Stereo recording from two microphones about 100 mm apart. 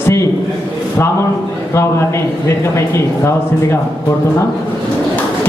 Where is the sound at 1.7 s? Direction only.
30° left (ahead or behind).